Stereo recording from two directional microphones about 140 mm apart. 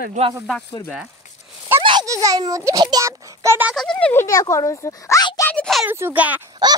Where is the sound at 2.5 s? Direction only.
25° right (ahead or behind).